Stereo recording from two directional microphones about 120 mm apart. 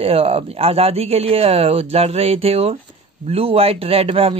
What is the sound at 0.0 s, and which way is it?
A man's voice, 55° right (ahead or behind).